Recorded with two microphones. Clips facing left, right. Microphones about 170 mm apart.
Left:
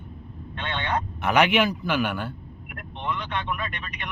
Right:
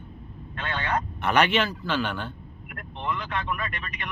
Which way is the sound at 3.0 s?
Centre (ahead or behind).